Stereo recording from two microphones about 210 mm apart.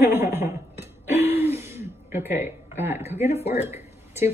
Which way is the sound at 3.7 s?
10° right (ahead or behind).